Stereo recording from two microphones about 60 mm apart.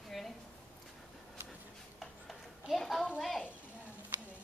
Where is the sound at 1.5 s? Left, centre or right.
Centre.